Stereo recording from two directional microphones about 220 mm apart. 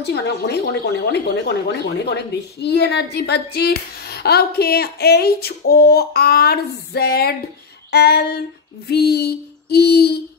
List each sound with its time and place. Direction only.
0.0 s speech: 50° left (ahead or behind)